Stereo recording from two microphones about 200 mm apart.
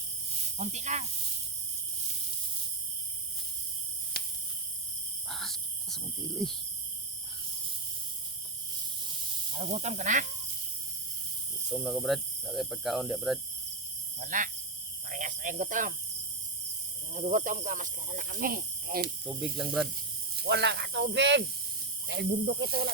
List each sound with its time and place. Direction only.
0.3 s speech: 35° right (ahead or behind)
4.1 s cricket: 50° left (ahead or behind)
5.3 s wild animals: centre (ahead or behind)
9.0 s snake: 30° right (ahead or behind)
11.7 s speech: centre (ahead or behind)
14.2 s speech: 40° right (ahead or behind)
17.2 s speech: 40° right (ahead or behind)
19.2 s speech: 5° right (ahead or behind)
20.3 s speech: 55° right (ahead or behind)